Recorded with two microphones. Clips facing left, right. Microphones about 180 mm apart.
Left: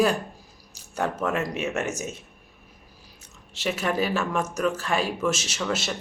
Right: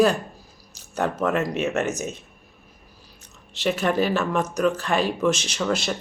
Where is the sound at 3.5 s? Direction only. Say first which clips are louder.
Right 4 dB; 5° left (ahead or behind).